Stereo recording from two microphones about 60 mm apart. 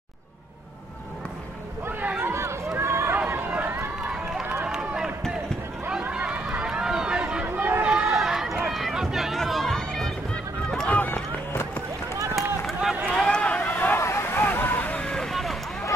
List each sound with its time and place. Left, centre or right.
1.9 s a sound: right
2.3 s run: right
4.6 s run: centre
6.1 s run: right
6.6 s run: centre
7.4 s chatter: right
7.8 s run: centre
8.1 s run: centre
10.9 s run: left
13.1 s a sound: centre
13.7 s a sound: left
14.0 s vehicle: left
15.0 s vehicle: centre